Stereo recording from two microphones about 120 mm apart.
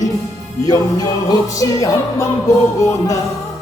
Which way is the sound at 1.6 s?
30° left (ahead or behind).